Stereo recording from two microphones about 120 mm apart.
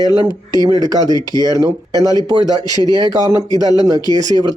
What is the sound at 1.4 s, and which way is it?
Speech, 30° right (ahead or behind).